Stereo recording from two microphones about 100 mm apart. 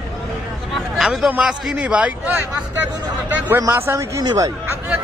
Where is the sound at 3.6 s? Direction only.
30° right (ahead or behind).